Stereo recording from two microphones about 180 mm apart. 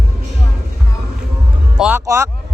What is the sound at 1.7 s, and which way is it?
Music, 5° right (ahead or behind).